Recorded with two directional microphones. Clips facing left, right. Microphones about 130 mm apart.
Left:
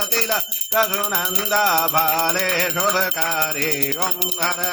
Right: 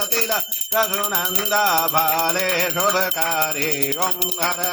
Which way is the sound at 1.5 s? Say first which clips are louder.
Even; 10° right (ahead or behind).